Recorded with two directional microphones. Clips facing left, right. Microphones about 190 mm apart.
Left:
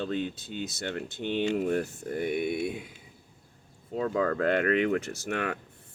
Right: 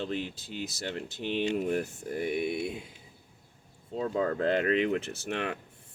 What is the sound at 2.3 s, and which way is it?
Speech, 55° left (ahead or behind).